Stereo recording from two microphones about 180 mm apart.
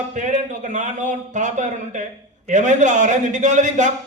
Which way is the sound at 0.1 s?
45° right (ahead or behind).